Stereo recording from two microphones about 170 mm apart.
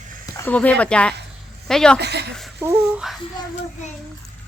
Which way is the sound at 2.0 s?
75° right (ahead or behind).